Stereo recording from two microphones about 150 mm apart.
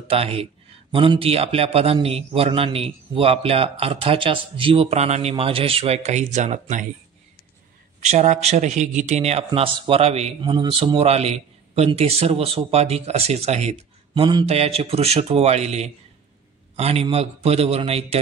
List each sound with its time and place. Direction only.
0.1 s a man's voice: 40° right (ahead or behind)
8.0 s a man's voice: 50° right (ahead or behind)